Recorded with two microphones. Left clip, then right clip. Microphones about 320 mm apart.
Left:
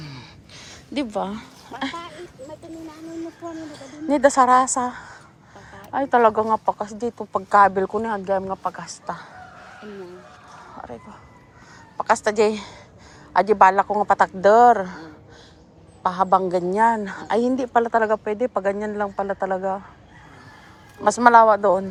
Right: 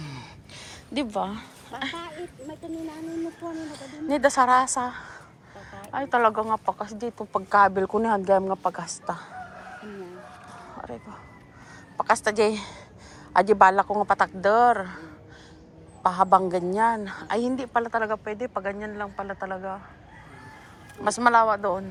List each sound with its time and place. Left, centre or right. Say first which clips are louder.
0.0 s gasp: left 1 dB; centre
0.9 s a woman's voice: left 2 dB; centre
3.6 s a woman's voice: left 1 dB; centre
7.9 s speech: right 2 dB; centre
10.8 s speech: left 2 dB; centre
12.0 s a woman's voice: left 3 dB; centre
16.0 s a woman's voice: left 1 dB; centre
21.0 s a woman's voice: left 7 dB; centre